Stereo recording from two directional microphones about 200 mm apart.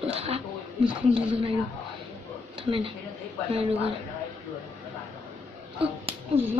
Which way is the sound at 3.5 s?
30° right (ahead or behind).